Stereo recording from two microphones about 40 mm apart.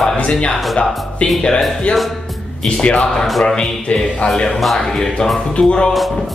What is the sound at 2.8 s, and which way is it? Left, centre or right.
Speech, left.